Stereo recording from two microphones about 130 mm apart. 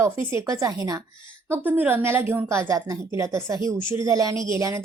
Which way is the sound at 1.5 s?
15° right (ahead or behind).